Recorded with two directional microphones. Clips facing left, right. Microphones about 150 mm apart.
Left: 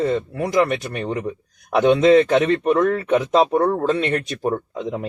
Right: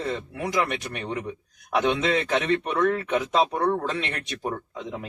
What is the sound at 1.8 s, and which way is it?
Speech, 40° left (ahead or behind).